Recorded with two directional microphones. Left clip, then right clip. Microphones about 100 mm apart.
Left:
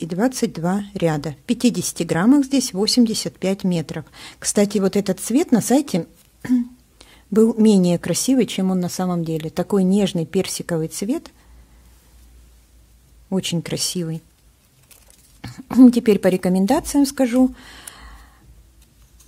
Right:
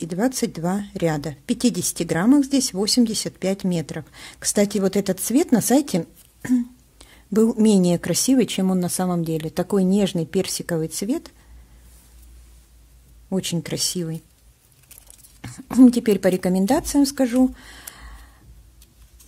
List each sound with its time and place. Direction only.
0.0 s a woman's voice: 20° left (ahead or behind)
7.0 s a sound: 15° left (ahead or behind)
7.5 s a woman's voice: 15° left (ahead or behind)
13.3 s a woman's voice: 20° left (ahead or behind)
15.4 s a woman's voice: 15° left (ahead or behind)